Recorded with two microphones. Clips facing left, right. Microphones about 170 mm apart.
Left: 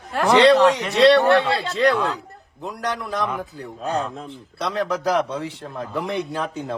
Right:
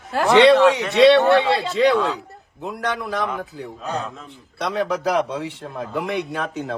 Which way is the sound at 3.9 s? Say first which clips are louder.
Left 4 dB; 35° left (ahead or behind).